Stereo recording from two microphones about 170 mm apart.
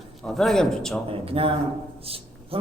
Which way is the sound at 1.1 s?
35° right (ahead or behind).